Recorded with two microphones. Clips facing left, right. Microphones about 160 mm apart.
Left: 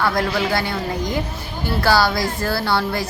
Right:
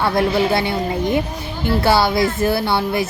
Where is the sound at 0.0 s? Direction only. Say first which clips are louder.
Right 3 dB; 25° right (ahead or behind).